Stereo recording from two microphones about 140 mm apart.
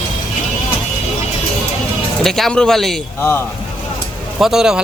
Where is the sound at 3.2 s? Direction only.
15° left (ahead or behind).